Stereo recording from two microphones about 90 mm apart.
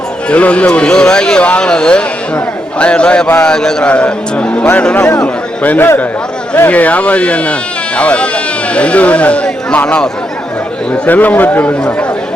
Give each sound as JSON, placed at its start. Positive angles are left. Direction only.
{"t": 0.3, "sound": "speech", "side_deg": 15}